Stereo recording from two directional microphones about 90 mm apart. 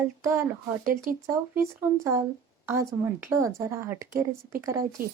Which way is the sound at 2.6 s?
30° right (ahead or behind).